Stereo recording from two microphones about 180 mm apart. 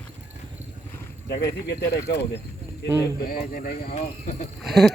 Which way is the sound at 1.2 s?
65° left (ahead or behind).